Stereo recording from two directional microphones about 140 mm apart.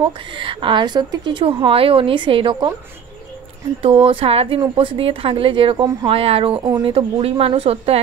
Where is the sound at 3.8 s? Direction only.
40° right (ahead or behind).